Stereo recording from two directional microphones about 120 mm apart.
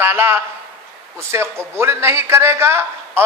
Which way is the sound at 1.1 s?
20° right (ahead or behind).